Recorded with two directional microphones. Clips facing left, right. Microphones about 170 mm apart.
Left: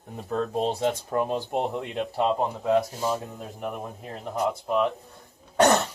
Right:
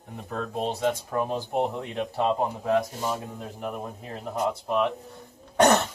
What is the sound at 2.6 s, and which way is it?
Speech, 10° left (ahead or behind).